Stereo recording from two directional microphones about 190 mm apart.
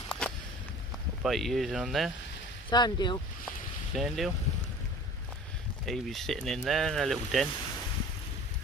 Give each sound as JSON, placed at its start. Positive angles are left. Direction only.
{"t": 0.2, "sound": "a sound", "side_deg": 5}
{"t": 1.2, "sound": "speech", "side_deg": 0}
{"t": 2.7, "sound": "speech", "side_deg": 20}
{"t": 3.9, "sound": "speech", "side_deg": 0}
{"t": 5.9, "sound": "speech", "side_deg": 0}